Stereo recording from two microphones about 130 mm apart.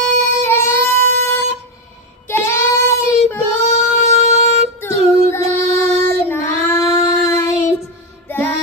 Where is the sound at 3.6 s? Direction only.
55° left (ahead or behind).